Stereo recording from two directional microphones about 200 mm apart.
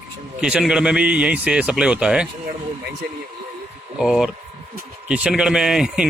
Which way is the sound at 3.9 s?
5° right (ahead or behind).